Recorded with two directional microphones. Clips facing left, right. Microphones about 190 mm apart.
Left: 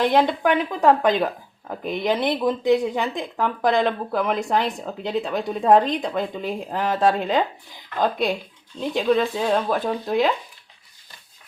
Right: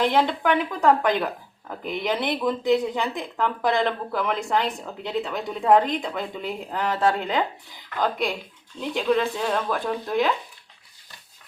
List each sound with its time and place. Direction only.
0.0 s speech: 20° left (ahead or behind)